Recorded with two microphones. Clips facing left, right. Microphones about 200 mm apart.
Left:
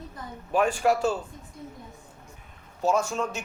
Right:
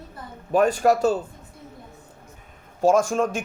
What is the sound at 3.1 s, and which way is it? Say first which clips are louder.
Speech: right 7 dB; 50° right (ahead or behind).